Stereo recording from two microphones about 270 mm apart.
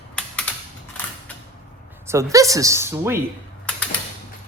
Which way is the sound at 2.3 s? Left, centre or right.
Centre.